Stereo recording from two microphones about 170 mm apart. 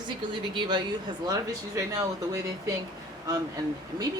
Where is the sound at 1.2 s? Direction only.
20° right (ahead or behind).